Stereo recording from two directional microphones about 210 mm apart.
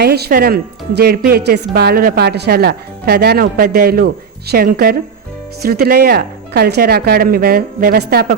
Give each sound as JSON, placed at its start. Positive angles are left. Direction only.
{"t": 0.0, "sound": "speech", "side_deg": -50}